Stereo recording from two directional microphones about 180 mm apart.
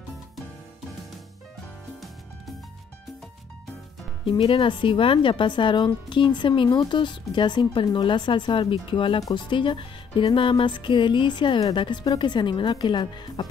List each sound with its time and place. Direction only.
4.3 s speech: 30° left (ahead or behind)